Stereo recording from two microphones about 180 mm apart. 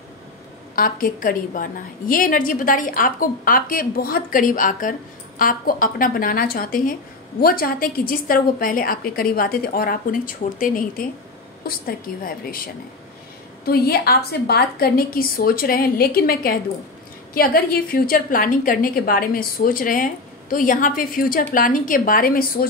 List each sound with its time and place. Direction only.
0.7 s a woman's voice: 50° left (ahead or behind)
13.7 s a woman's voice: 60° left (ahead or behind)